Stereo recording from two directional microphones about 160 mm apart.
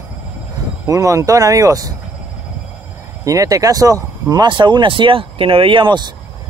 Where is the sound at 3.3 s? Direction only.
20° right (ahead or behind).